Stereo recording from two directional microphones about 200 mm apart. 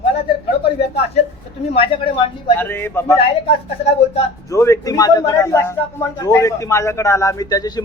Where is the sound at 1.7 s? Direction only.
25° left (ahead or behind).